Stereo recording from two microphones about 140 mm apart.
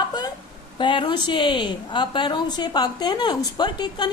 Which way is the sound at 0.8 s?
35° left (ahead or behind).